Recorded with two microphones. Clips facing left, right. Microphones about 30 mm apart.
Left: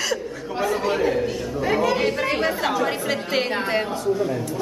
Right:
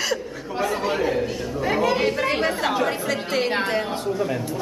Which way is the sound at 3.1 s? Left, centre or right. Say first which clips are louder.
Even; centre.